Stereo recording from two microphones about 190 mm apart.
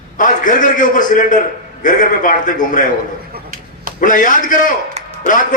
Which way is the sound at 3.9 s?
45° left (ahead or behind).